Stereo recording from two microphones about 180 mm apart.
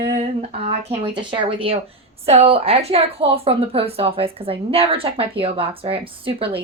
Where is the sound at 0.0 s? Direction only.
35° right (ahead or behind).